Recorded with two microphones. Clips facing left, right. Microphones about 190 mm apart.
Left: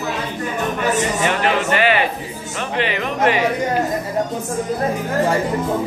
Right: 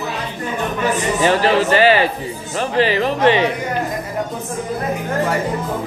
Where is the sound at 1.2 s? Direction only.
35° right (ahead or behind).